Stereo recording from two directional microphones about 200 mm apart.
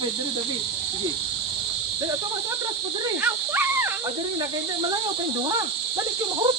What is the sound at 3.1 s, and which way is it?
Speech, 10° right (ahead or behind).